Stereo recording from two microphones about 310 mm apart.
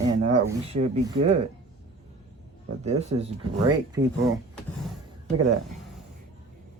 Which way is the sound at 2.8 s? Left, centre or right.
Centre.